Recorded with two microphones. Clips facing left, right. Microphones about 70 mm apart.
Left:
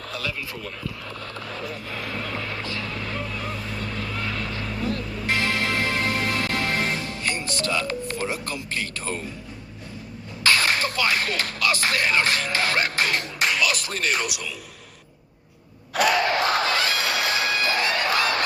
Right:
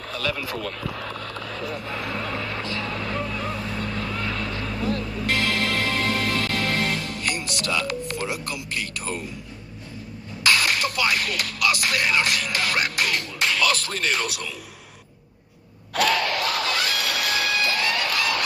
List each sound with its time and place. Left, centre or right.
0.4 s speech: right
1.0 s a sound: right
1.5 s vehicle: left
1.7 s a sound: right
2.7 s vehicle: right
4.4 s vehicle: left
4.9 s music: left
10.4 s music: left
16.0 s crowd: centre